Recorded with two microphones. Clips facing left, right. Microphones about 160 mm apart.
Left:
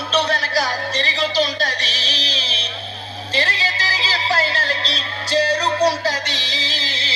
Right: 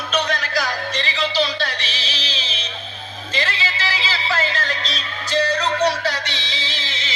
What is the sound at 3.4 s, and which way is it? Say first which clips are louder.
Music: left 2 dB; 40° left (ahead or behind).